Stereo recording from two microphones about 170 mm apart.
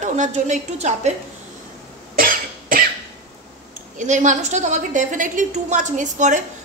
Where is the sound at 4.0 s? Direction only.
45° right (ahead or behind).